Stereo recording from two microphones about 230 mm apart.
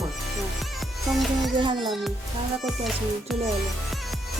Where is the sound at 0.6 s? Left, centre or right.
Centre.